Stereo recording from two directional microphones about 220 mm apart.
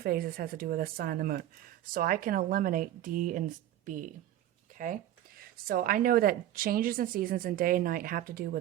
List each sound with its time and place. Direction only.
0.0 s speech: 45° right (ahead or behind)